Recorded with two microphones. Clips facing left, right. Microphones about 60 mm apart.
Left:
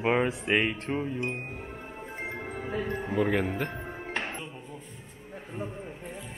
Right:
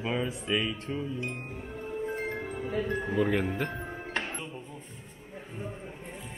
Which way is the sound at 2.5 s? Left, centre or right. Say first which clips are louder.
Even; left.